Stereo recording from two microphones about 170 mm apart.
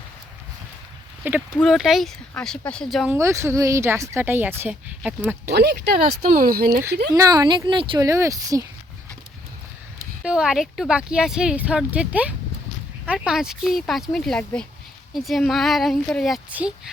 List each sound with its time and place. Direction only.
1.2 s speech: 10° right (ahead or behind)
3.1 s speech: 15° right (ahead or behind)
5.5 s speech: 75° right (ahead or behind)
7.1 s speech: 20° right (ahead or behind)
8.0 s speech: 20° right (ahead or behind)
10.2 s speech: 5° right (ahead or behind)